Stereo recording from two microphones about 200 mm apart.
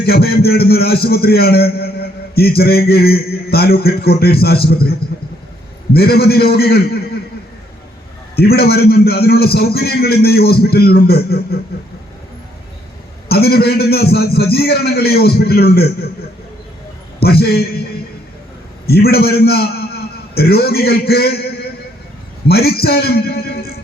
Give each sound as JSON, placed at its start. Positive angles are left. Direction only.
{"t": 0.0, "sound": "a man's voice", "side_deg": 50}
{"t": 8.4, "sound": "a man's voice", "side_deg": 50}
{"t": 13.2, "sound": "a man's voice", "side_deg": 50}
{"t": 17.2, "sound": "a man's voice", "side_deg": 50}
{"t": 18.9, "sound": "a man's voice", "side_deg": 50}